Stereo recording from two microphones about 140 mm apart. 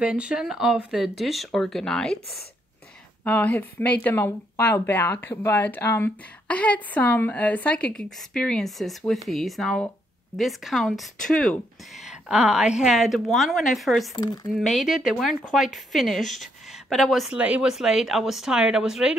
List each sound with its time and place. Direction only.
0.0 s speech: 10° right (ahead or behind)
3.3 s speech: 10° left (ahead or behind)
14.1 s speech: 30° left (ahead or behind)
14.6 s speech: centre (ahead or behind)